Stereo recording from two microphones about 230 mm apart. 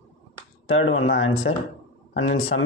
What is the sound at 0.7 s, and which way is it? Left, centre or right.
A man's voice, left.